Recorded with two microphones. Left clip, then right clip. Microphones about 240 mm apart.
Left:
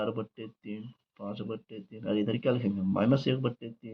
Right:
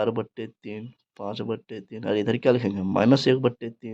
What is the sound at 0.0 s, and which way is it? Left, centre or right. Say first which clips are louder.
Speech: right 8 dB; right.